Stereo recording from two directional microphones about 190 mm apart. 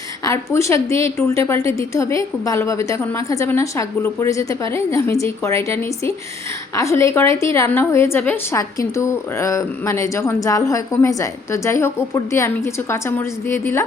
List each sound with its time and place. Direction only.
0.3 s a woman's voice: 15° left (ahead or behind)